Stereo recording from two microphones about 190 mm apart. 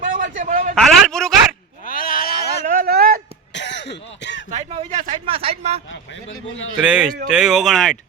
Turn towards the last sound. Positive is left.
turn(degrees=0)  # may be behind; listen again after turning